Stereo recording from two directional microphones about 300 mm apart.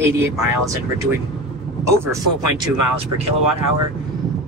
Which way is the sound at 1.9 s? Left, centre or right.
Centre.